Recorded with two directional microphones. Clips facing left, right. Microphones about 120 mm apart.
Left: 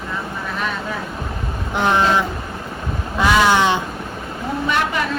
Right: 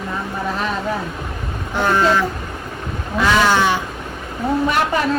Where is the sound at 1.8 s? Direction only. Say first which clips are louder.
Right 1 dB; 15° left (ahead or behind).